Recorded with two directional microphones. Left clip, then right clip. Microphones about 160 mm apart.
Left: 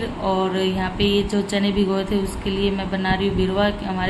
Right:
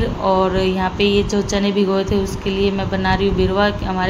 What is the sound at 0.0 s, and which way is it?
A woman's voice, 10° right (ahead or behind).